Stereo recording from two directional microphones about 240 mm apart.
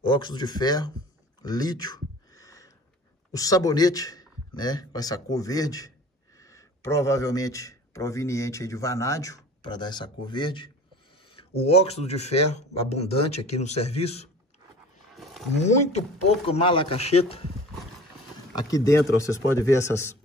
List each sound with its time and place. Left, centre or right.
0.0 s a man's voice: centre
1.4 s a sound: centre
3.3 s a man's voice: centre
15.0 s a sound: centre
16.4 s speech: left
18.7 s a man's voice: centre